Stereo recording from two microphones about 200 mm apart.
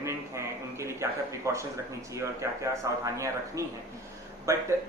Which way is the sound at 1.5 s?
15° right (ahead or behind).